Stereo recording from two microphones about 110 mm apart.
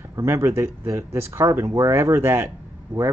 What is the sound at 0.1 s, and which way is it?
Speech, 25° right (ahead or behind).